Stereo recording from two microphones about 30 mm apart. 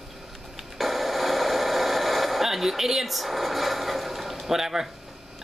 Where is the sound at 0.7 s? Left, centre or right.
Centre.